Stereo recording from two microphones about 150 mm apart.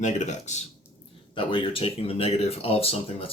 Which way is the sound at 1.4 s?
35° left (ahead or behind).